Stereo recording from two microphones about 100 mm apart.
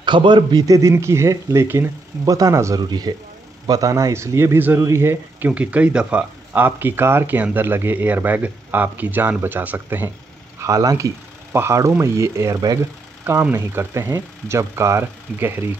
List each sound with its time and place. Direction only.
0.0 s speech: 50° right (ahead or behind); by 2.8 s 30° right (ahead or behind)
2.8 s speech: 45° right (ahead or behind); by 5.5 s 25° right (ahead or behind)
5.5 s speech: 15° right (ahead or behind)
10.6 s speech: 35° right (ahead or behind)